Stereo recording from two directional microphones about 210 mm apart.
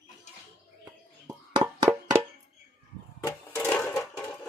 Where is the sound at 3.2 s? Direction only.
15° left (ahead or behind).